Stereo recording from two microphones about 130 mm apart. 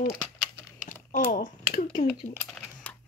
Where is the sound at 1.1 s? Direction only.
70° left (ahead or behind).